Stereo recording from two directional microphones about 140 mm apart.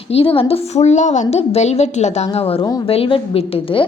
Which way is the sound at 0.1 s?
40° left (ahead or behind).